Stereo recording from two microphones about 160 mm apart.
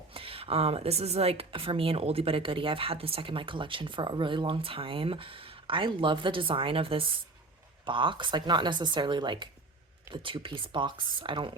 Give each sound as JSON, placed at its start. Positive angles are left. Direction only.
{"t": 0.1, "sound": "a woman's voice", "side_deg": -35}